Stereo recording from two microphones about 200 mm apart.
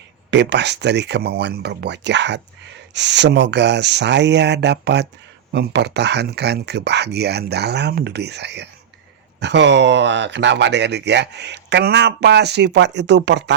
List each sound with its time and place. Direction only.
0.3 s speech: 60° right (ahead or behind)